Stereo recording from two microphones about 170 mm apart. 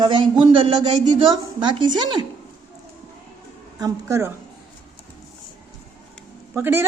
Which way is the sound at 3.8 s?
20° right (ahead or behind).